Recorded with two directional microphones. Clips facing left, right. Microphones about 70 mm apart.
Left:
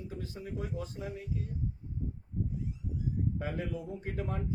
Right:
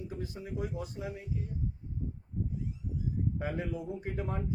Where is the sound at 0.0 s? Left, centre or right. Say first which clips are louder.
Right 1 dB; right.